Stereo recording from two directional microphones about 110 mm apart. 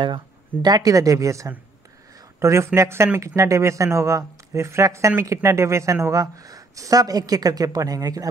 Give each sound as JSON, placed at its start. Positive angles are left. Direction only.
{"t": 0.0, "sound": "speech", "side_deg": -45}